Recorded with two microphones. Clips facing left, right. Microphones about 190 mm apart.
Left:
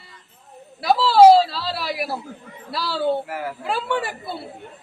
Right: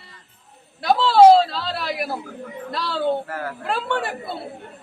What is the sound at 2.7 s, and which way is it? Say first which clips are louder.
A woman's voice: left 1 dB; 5° left (ahead or behind).